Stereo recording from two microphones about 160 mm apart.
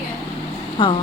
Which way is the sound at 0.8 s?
35° left (ahead or behind).